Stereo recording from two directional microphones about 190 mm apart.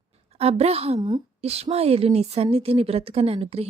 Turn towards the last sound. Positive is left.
turn(degrees=-30)  # may be behind; listen again after turning